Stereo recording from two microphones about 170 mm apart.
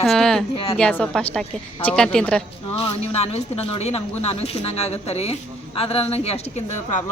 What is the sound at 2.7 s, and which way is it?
A woman's voice, 35° left (ahead or behind).